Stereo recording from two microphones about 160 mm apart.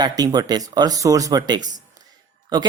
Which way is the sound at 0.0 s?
25° right (ahead or behind).